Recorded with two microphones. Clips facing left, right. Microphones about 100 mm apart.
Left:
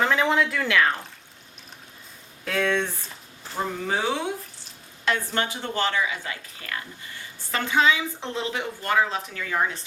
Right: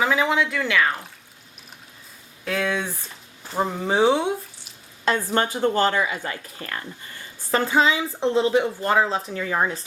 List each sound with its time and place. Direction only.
0.0 s speech: 5° right (ahead or behind)
2.4 s speech: centre (ahead or behind)
3.5 s speech: 25° right (ahead or behind)
5.0 s a woman's voice: 35° right (ahead or behind)